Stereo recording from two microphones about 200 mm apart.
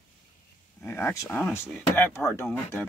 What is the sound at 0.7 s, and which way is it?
Speech, 10° left (ahead or behind).